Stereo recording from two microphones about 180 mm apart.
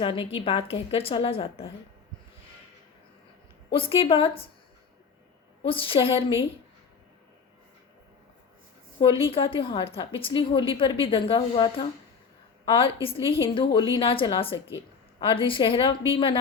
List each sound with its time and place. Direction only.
0.0 s a woman's voice: 30° left (ahead or behind)
3.8 s a woman's voice: 30° left (ahead or behind)
5.6 s a woman's voice: 30° left (ahead or behind)
9.0 s a woman's voice: 30° left (ahead or behind)